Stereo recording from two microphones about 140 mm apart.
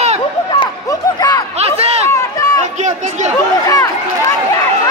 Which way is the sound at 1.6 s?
45° right (ahead or behind).